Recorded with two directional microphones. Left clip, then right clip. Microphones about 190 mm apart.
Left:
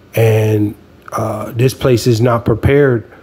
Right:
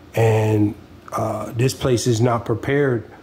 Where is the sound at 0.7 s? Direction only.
15° left (ahead or behind).